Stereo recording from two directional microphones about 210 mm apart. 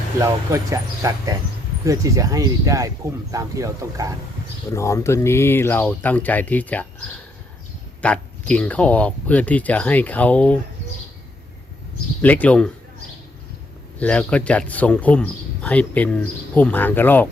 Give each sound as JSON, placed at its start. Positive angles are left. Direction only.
{"t": 0.2, "sound": "speech", "side_deg": -15}
{"t": 4.7, "sound": "speech", "side_deg": 15}
{"t": 8.0, "sound": "speech", "side_deg": 5}
{"t": 12.2, "sound": "speech", "side_deg": 5}
{"t": 14.0, "sound": "speech", "side_deg": 5}